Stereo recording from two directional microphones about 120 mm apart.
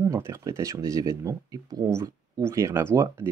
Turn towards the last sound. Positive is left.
turn(degrees=-20)  # may be behind; listen again after turning